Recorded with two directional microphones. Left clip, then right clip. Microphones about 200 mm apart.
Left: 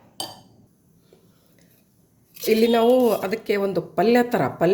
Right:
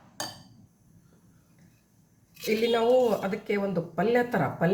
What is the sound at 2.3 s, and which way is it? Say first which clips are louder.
Speech: left 7 dB; 50° left (ahead or behind).